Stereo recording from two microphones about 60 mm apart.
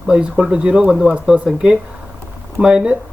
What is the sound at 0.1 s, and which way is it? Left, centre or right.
Speech, centre.